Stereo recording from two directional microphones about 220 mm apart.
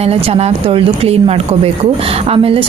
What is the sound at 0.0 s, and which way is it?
Speech, 25° right (ahead or behind).